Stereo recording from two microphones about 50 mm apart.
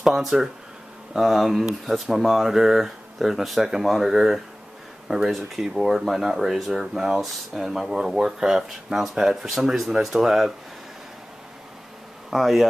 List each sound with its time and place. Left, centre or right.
0.0 s speech: centre
12.3 s speech: centre